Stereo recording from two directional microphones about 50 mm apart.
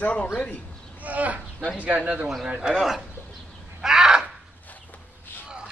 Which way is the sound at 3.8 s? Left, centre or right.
Centre.